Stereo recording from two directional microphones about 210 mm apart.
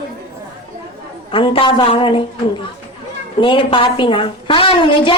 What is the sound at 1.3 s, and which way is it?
Speech, 25° left (ahead or behind).